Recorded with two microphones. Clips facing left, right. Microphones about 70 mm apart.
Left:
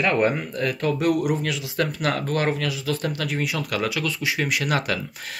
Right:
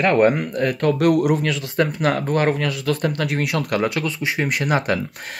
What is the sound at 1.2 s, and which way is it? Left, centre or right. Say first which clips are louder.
Speech: right 5 dB; centre.